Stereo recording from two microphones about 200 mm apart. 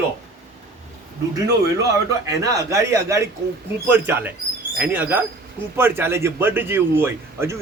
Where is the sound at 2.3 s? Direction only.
15° right (ahead or behind).